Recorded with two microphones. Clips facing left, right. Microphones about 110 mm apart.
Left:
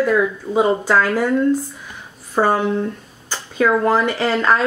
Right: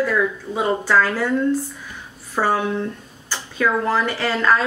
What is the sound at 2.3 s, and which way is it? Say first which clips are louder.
Speech: left 3 dB; 15° left (ahead or behind).